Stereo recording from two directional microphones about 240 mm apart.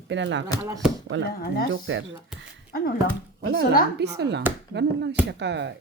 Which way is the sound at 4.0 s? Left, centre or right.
Right.